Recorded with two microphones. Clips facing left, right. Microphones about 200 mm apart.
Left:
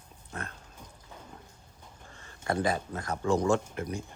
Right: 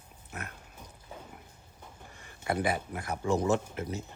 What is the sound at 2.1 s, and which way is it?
Speech, 15° right (ahead or behind).